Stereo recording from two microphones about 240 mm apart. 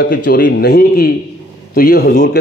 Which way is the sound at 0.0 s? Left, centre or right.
Left.